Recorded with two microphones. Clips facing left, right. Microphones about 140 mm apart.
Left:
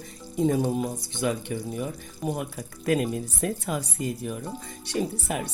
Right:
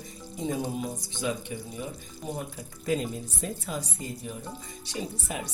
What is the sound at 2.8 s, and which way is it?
Speech, 65° left (ahead or behind).